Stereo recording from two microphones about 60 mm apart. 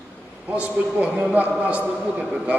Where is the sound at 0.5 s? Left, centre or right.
Right.